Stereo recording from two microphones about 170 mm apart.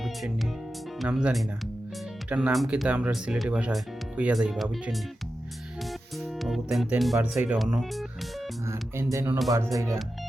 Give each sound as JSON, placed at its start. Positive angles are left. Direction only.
{"t": 0.0, "sound": "music", "side_deg": 0}
{"t": 0.9, "sound": "speech", "side_deg": -5}
{"t": 6.4, "sound": "speech", "side_deg": 0}
{"t": 8.6, "sound": "a sound", "side_deg": -15}
{"t": 9.7, "sound": "speech", "side_deg": -15}